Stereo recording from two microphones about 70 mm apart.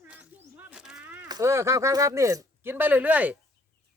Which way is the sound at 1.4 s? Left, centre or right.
Right.